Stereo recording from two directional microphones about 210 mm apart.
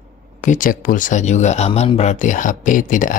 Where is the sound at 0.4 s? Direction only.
35° left (ahead or behind).